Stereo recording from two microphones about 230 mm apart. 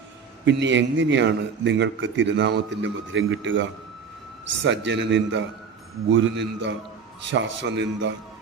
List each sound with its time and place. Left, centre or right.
0.4 s a man's voice: right